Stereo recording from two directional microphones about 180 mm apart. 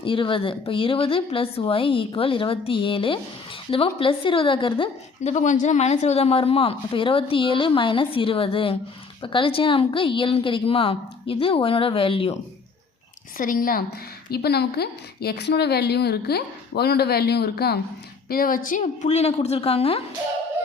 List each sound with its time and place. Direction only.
0.0 s a woman's voice: 30° left (ahead or behind)
13.3 s a woman's voice: 50° left (ahead or behind); by 20.0 s 35° left (ahead or behind)